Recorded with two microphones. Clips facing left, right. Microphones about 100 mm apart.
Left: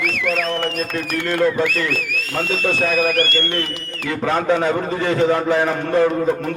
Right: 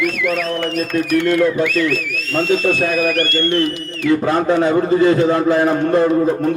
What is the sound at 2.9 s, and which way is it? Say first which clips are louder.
Speech: right 1 dB; 45° left (ahead or behind).